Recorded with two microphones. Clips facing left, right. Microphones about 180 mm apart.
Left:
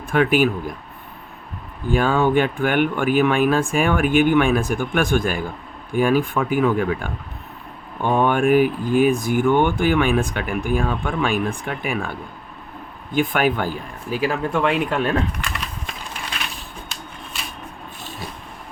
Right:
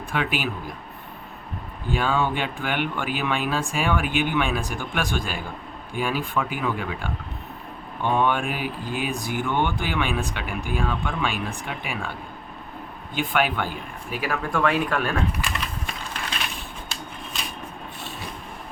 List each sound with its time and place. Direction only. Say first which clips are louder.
0.1 s speech: left 10 dB; 50° left (ahead or behind)
1.9 s speech: left 6 dB; 45° left (ahead or behind)
13.1 s speech: left 5 dB; 45° left (ahead or behind); by 15.1 s 25° left (ahead or behind)